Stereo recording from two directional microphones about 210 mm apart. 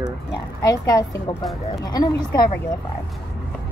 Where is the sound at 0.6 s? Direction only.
15° left (ahead or behind).